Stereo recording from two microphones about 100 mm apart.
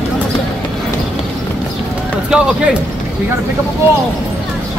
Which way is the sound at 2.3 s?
5° right (ahead or behind).